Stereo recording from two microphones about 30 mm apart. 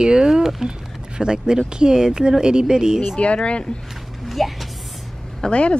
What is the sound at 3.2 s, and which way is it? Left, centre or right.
Speech, left.